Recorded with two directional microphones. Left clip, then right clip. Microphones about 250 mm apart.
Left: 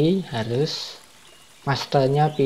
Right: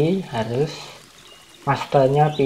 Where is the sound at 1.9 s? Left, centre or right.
Left.